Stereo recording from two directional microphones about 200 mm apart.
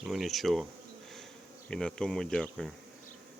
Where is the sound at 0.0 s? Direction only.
Centre (ahead or behind).